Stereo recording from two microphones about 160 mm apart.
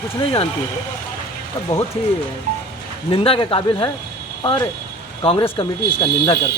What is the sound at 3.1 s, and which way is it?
Speech, 35° left (ahead or behind).